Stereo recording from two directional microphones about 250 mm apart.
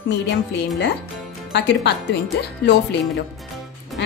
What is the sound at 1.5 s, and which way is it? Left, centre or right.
Speech, left.